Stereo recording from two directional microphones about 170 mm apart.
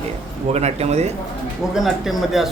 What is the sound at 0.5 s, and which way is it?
Speech, 40° right (ahead or behind).